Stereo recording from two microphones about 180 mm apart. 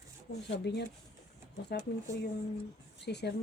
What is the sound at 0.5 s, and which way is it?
Speech, 70° left (ahead or behind).